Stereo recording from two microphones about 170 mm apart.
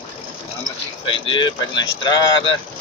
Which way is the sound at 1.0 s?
30° left (ahead or behind).